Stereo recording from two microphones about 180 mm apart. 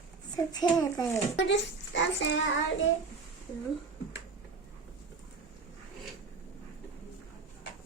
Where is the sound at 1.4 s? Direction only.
85° left.